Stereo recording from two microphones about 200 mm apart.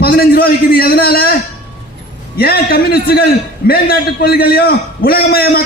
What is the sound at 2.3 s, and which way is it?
A man's voice, 50° left (ahead or behind).